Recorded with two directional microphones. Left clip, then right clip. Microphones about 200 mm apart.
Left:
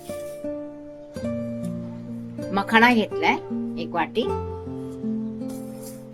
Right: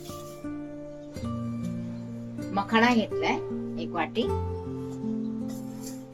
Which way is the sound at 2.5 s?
35° left (ahead or behind).